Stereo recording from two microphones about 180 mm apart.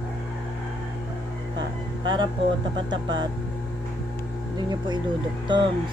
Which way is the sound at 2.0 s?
25° right (ahead or behind).